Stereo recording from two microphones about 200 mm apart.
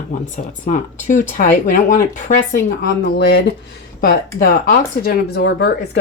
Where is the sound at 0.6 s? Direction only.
40° left (ahead or behind).